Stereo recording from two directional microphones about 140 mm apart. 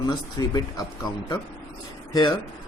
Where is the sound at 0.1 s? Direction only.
30° left (ahead or behind).